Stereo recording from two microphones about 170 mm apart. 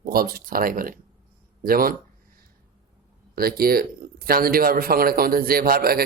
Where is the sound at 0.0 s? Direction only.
60° right (ahead or behind).